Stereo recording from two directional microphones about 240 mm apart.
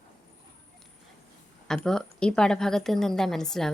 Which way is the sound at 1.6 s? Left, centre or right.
Centre.